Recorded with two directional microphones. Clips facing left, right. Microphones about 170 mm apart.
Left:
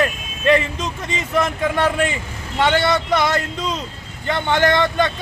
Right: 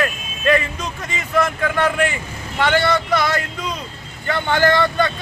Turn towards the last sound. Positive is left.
turn(degrees=20)  # may be behind; listen again after turning